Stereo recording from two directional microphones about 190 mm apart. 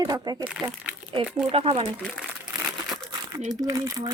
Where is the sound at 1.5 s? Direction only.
30° right (ahead or behind).